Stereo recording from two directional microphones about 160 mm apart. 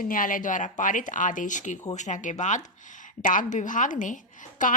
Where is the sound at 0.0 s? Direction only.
60° left (ahead or behind).